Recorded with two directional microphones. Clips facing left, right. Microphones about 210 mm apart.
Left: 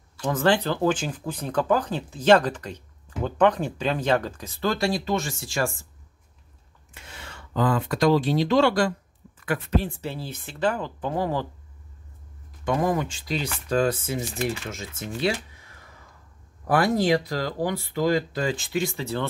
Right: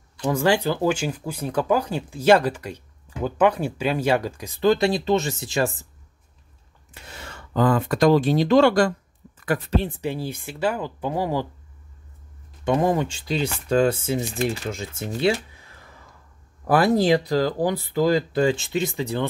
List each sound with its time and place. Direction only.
0.2 s speech: 10° right (ahead or behind)
6.9 s speech: 40° right (ahead or behind)
9.8 s speech: 20° right (ahead or behind)
12.6 s speech: 25° right (ahead or behind)
16.7 s speech: 30° right (ahead or behind)